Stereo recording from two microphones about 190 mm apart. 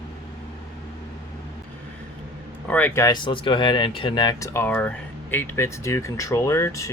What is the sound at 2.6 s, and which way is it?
Speech, 10° left (ahead or behind).